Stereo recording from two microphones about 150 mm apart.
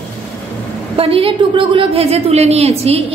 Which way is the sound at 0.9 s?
40° right (ahead or behind).